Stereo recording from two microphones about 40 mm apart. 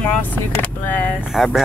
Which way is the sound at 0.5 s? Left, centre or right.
Left.